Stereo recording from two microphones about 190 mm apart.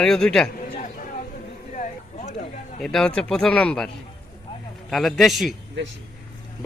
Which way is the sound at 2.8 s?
5° left (ahead or behind).